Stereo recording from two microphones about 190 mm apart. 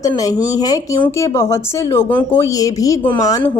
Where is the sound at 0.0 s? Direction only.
20° left (ahead or behind).